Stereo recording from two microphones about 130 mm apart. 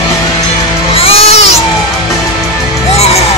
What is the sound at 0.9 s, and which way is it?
Baby cry, 50° left (ahead or behind).